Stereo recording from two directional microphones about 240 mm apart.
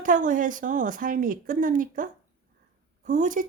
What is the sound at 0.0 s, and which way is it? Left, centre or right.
Speech, right.